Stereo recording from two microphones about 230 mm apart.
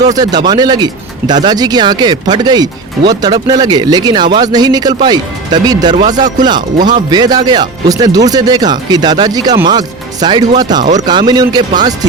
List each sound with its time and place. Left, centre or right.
0.0 s speech: centre